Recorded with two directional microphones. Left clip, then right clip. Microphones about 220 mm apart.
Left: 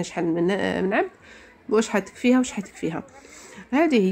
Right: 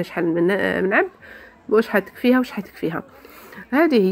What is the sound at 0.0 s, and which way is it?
Speech, 10° right (ahead or behind).